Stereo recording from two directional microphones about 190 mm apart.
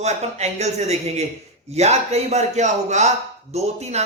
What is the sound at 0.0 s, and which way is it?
A man's voice, 35° right (ahead or behind).